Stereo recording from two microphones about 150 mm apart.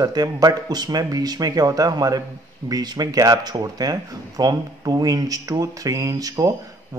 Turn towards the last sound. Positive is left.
turn(degrees=-25)  # may be behind; listen again after turning